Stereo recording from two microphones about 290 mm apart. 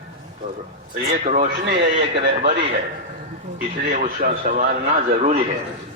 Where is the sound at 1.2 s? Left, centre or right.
Right.